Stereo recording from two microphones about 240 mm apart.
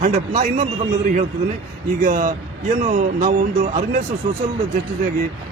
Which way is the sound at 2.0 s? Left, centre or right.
Right.